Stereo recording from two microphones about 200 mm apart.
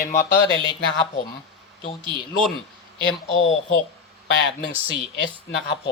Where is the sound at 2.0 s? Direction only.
25° right (ahead or behind).